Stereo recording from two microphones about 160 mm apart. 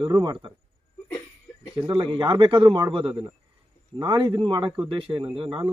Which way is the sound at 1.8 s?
35° right (ahead or behind).